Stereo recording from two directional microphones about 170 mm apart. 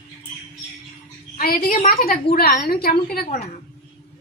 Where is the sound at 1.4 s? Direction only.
60° left (ahead or behind).